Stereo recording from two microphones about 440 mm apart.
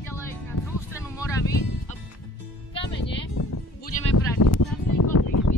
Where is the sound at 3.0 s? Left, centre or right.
Left.